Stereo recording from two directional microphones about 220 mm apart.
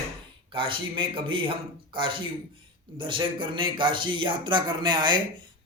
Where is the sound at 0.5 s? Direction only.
25° right (ahead or behind).